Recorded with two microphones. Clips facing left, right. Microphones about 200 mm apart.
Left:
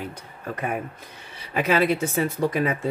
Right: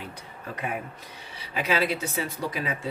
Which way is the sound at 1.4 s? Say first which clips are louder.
Left 5 dB; 50° left (ahead or behind).